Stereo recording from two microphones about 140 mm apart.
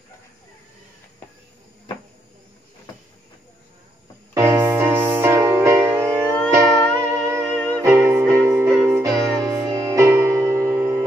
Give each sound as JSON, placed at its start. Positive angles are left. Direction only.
{"t": 4.3, "sound": "music", "side_deg": -25}
{"t": 7.3, "sound": "music", "side_deg": 10}
{"t": 7.8, "sound": "music", "side_deg": -15}